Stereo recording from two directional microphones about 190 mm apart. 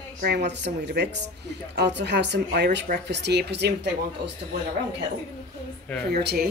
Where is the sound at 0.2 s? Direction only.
60° right (ahead or behind).